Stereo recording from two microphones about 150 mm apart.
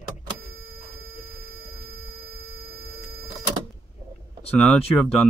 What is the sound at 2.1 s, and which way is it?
Hum, 80° right.